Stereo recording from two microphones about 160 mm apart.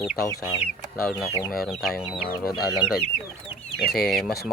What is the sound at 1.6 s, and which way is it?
Speech, centre (ahead or behind).